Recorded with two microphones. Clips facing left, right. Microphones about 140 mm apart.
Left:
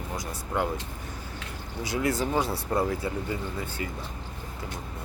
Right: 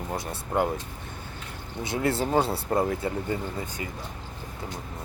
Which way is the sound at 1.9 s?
30° right (ahead or behind).